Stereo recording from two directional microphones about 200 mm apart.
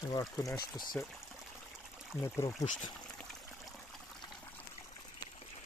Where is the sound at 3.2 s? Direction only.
Centre (ahead or behind).